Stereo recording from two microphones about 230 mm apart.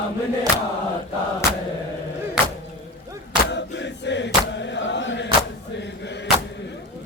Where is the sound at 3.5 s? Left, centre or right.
Left.